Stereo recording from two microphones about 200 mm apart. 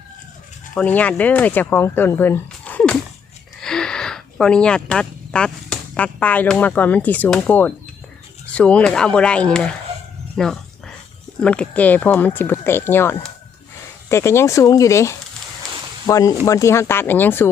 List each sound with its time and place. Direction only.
0.7 s speech: 5° left (ahead or behind)
10.3 s dog: centre (ahead or behind)
11.3 s speech: 5° left (ahead or behind)